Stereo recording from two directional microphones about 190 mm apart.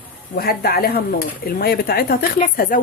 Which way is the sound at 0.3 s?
55° left (ahead or behind).